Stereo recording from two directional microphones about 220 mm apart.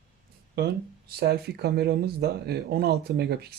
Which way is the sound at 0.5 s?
45° right (ahead or behind).